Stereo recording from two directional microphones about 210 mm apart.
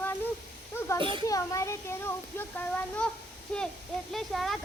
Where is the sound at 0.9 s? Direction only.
25° right (ahead or behind).